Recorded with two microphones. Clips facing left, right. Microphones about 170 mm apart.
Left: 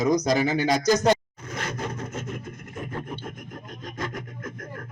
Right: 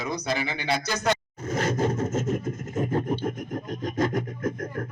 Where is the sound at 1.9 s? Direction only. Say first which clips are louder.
Right 8 dB; 45° right (ahead or behind).